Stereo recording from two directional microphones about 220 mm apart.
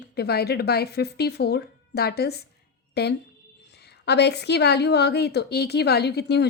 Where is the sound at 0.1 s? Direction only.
45° left (ahead or behind).